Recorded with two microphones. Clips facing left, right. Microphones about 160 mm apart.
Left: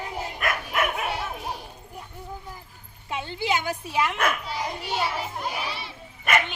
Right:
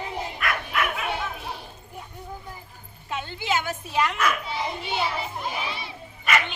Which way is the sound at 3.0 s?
15° left (ahead or behind).